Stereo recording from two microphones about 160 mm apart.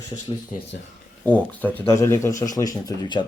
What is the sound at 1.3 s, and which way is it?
Speech, 10° left (ahead or behind).